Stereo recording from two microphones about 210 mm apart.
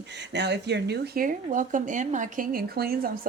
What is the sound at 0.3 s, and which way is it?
Speech, 55° right (ahead or behind).